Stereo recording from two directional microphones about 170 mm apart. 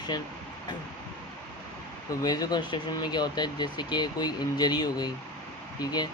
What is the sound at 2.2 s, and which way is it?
Speech, 25° left (ahead or behind).